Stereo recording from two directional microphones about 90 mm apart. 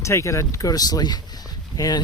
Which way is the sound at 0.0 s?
35° left (ahead or behind).